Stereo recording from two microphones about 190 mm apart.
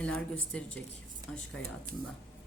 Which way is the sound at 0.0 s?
5° left (ahead or behind).